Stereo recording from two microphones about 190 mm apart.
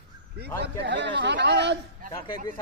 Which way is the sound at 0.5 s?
60° right (ahead or behind).